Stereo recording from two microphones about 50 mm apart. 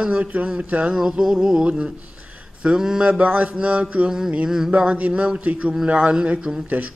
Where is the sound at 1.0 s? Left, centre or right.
Centre.